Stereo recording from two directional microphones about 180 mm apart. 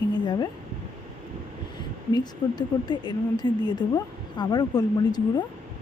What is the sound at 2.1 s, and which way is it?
Speech, 25° left (ahead or behind).